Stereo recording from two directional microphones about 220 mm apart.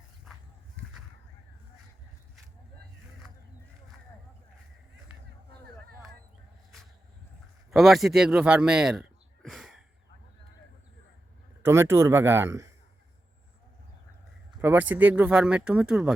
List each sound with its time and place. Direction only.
7.7 s a man's voice: centre (ahead or behind)
11.6 s speech: 10° right (ahead or behind)
14.6 s speech: 10° right (ahead or behind)